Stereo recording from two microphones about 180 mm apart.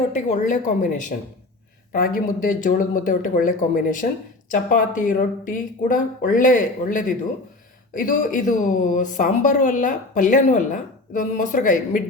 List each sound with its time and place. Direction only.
0.1 s speech: 40° left (ahead or behind)